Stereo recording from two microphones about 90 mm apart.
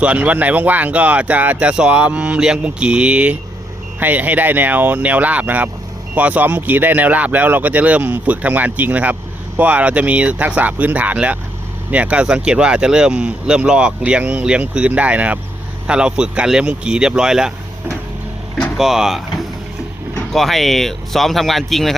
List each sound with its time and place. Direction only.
0.0 s speech: 15° right (ahead or behind)
18.8 s speech: 5° right (ahead or behind)
20.3 s speech: centre (ahead or behind)